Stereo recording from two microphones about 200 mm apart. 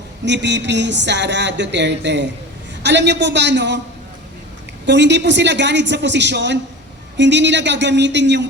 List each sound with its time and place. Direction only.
0.3 s speech: 60° right (ahead or behind)
4.9 s speech: 60° right (ahead or behind)